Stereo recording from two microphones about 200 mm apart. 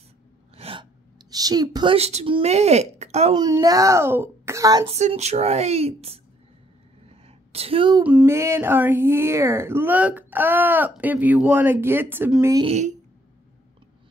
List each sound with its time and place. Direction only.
0.6 s sneeze: 30° right (ahead or behind)
1.3 s speech: 20° right (ahead or behind)
3.3 s speech: 20° right (ahead or behind)
4.8 s speech: 35° right (ahead or behind)
7.1 s a sound: 30° right (ahead or behind)
8.0 s speech: 5° right (ahead or behind)
12.6 s speech: 35° right (ahead or behind)